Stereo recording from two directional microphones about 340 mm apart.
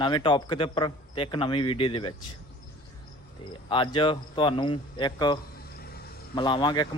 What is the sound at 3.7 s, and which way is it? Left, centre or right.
Speech, centre.